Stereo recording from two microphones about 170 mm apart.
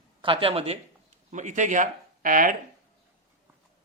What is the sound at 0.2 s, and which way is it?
Speech, 30° right (ahead or behind).